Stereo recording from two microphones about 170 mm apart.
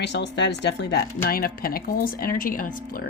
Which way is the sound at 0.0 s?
90° left.